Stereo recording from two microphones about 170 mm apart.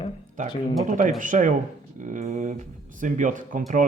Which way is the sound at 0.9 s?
50° right (ahead or behind).